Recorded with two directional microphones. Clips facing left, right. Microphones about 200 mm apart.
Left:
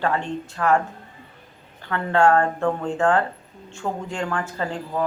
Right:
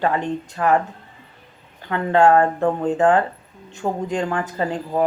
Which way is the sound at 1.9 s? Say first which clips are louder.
Right 3 dB; 20° right (ahead or behind).